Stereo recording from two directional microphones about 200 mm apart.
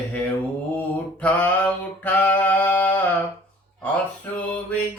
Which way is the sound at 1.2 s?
5° left (ahead or behind).